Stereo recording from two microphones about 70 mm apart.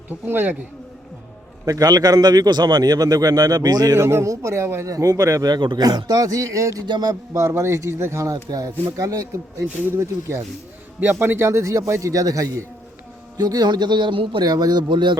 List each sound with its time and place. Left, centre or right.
0.3 s speech: right
1.6 s a man's voice: right
3.9 s speech: right
6.8 s music: right
7.3 s speech: right
13.3 s a man's voice: right